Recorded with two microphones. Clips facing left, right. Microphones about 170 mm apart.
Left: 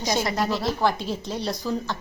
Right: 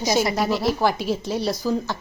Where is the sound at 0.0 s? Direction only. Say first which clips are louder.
Right 3 dB; 10° right (ahead or behind).